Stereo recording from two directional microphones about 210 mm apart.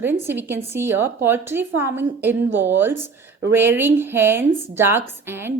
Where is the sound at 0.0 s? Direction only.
10° right (ahead or behind).